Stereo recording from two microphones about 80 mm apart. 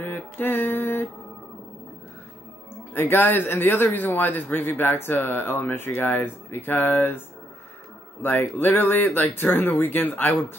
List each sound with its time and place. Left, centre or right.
0.0 s mantra: left
2.9 s speech: left